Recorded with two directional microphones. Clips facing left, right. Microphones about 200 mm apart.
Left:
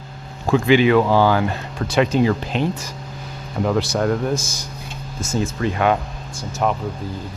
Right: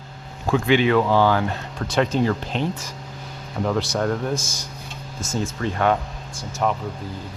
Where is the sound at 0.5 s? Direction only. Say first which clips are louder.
Left 4 dB; 5° left (ahead or behind).